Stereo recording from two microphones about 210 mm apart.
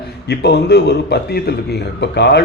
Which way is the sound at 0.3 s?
50° left (ahead or behind).